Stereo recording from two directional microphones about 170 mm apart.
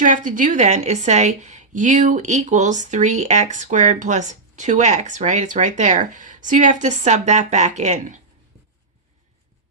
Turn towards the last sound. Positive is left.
turn(degrees=-45)  # may be behind; listen again after turning